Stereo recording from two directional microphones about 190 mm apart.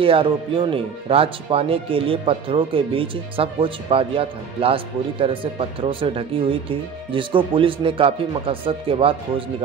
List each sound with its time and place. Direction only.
0.0 s speech: 25° right (ahead or behind)